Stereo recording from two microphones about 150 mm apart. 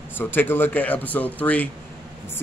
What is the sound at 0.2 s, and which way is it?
Speech, 15° left (ahead or behind).